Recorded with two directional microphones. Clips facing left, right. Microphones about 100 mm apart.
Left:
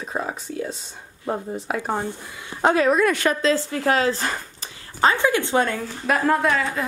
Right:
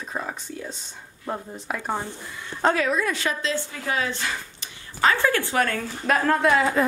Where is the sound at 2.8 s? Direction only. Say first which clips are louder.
Left 6 dB; 60° left (ahead or behind).